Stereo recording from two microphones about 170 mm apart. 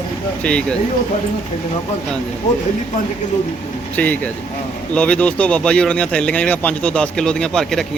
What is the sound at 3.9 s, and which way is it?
Speech, 10° left (ahead or behind).